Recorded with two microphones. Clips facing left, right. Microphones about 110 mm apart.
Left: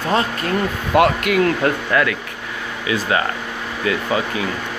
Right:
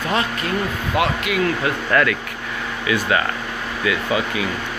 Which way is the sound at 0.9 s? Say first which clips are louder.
Left 6 dB; 50° left (ahead or behind).